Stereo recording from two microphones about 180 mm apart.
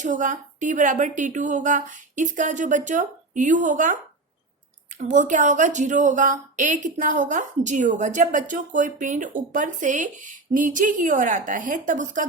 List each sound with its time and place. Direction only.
0.0 s a woman's voice: 45° right (ahead or behind)